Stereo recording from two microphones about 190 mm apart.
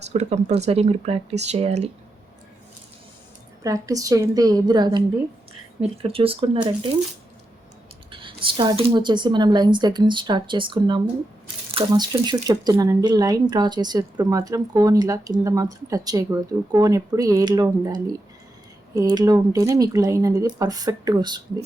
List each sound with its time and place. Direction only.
0.1 s speech: 35° right (ahead or behind)
3.6 s speech: 15° right (ahead or behind)
8.1 s speech: 25° right (ahead or behind)
18.9 s speech: 20° right (ahead or behind)